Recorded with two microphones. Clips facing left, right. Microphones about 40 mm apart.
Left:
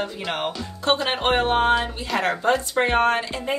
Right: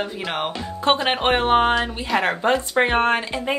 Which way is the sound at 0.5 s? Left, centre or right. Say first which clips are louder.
Right 4 dB; right.